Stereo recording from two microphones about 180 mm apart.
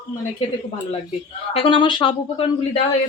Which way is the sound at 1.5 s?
30° left (ahead or behind).